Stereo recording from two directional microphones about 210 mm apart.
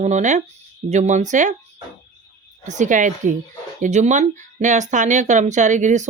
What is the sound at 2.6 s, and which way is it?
Speech, 35° right (ahead or behind).